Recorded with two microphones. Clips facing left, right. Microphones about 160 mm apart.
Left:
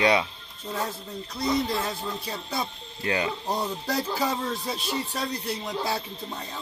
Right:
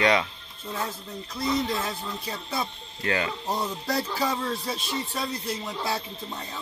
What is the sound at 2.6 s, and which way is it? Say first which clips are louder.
Speech: even; 15° left (ahead or behind).